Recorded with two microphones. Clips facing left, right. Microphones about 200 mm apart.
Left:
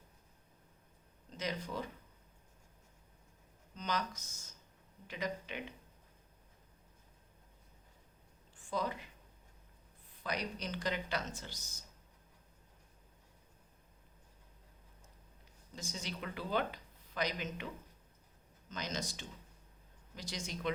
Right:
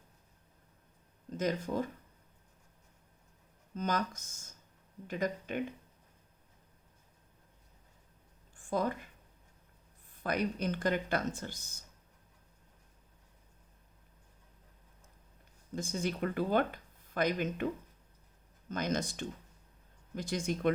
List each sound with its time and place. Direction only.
1.4 s speech: 50° right (ahead or behind)
3.8 s speech: 50° right (ahead or behind)
8.5 s speech: 50° right (ahead or behind)
10.1 s speech: 50° right (ahead or behind)
15.7 s speech: 50° right (ahead or behind)
18.7 s speech: 55° right (ahead or behind)